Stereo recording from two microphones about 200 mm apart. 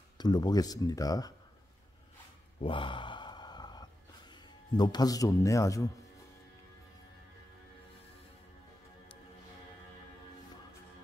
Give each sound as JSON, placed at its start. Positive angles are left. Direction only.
{"t": 0.2, "sound": "speech", "side_deg": 20}
{"t": 2.6, "sound": "sigh", "side_deg": 25}
{"t": 4.3, "sound": "speech", "side_deg": 20}